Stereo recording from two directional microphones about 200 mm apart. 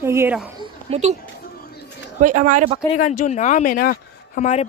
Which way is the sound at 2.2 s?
40° right (ahead or behind).